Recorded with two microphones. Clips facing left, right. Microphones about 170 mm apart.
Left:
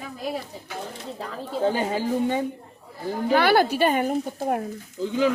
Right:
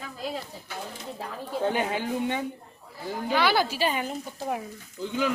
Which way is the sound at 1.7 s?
35° left (ahead or behind).